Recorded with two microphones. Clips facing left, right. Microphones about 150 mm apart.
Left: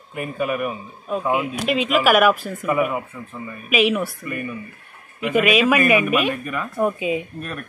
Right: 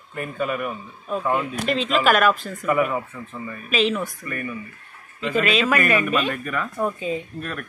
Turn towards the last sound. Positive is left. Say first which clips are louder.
# left 3 dB
turn(degrees=15)  # may be behind; listen again after turning